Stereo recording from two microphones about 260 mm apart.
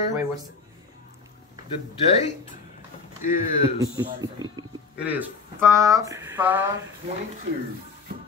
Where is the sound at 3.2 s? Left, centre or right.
Left.